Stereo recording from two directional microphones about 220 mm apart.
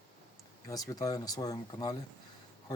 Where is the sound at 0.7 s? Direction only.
15° left (ahead or behind).